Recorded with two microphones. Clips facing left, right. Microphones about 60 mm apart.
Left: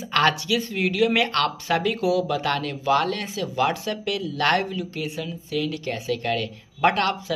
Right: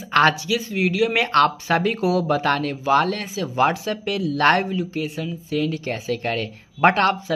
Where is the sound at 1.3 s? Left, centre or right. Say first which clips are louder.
Right 5 dB; right.